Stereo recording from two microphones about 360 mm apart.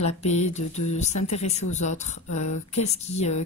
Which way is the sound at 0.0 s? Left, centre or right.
Centre.